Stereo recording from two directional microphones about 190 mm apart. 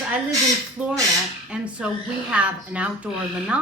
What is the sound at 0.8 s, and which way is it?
A woman's voice, 5° right (ahead or behind).